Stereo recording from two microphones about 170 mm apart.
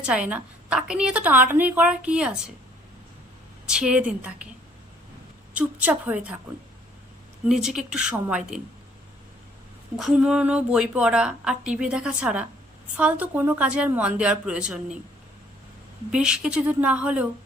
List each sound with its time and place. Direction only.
0.0 s a woman's voice: 5° right (ahead or behind)
3.7 s a woman's voice: 5° right (ahead or behind)
5.5 s a woman's voice: 10° right (ahead or behind)
7.4 s a woman's voice: 5° right (ahead or behind)
10.0 s a woman's voice: 5° right (ahead or behind)
16.1 s a woman's voice: 5° right (ahead or behind)